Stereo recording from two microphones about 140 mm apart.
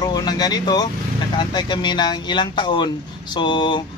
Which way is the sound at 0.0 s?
30° left (ahead or behind).